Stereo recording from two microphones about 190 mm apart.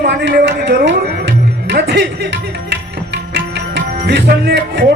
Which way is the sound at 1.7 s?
60° right (ahead or behind).